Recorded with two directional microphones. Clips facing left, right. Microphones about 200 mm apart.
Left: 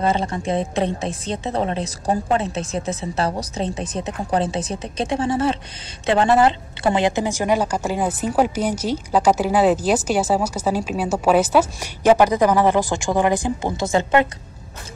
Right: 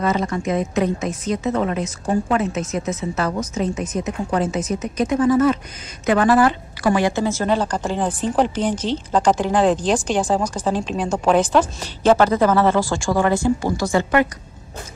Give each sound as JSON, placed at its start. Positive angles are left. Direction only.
{"t": 0.0, "sound": "a woman's voice", "side_deg": 30}